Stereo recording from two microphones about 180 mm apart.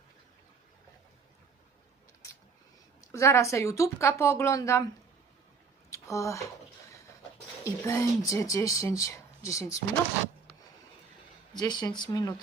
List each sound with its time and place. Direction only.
3.0 s speech: 15° left (ahead or behind)
5.9 s speech: 15° left (ahead or behind)
7.6 s speech: 15° left (ahead or behind)
11.5 s speech: 25° left (ahead or behind)